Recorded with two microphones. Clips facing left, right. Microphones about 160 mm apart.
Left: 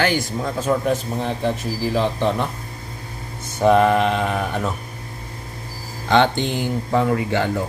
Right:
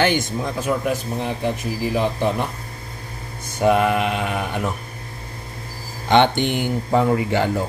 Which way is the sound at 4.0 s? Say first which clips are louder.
Left 3 dB; 10° right (ahead or behind).